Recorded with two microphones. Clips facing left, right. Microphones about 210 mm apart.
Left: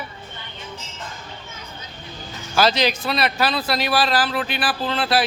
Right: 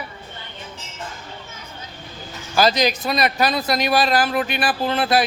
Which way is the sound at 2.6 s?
10° right (ahead or behind).